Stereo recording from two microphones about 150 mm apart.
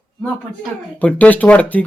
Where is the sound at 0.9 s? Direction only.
10° left (ahead or behind).